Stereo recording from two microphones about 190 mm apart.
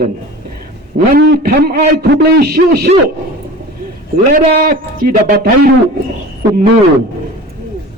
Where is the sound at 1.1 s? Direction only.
55° right (ahead or behind).